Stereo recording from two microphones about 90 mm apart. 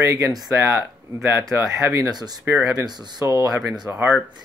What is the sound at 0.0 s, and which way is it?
Speech, 35° right (ahead or behind).